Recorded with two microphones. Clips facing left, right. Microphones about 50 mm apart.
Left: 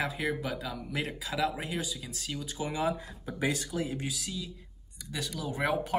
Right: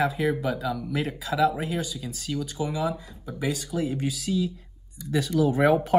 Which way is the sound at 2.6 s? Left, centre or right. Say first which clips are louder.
Right 1 dB; left.